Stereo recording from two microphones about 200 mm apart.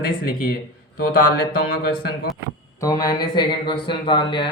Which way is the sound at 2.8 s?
20° left (ahead or behind).